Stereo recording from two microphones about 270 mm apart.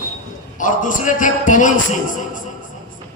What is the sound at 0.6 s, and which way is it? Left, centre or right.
A man's voice, left.